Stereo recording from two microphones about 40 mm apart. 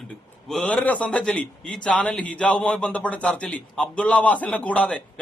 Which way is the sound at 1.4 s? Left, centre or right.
Left.